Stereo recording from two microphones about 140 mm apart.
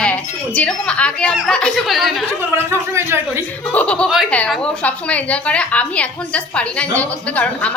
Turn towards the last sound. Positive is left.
turn(degrees=10)  # may be behind; listen again after turning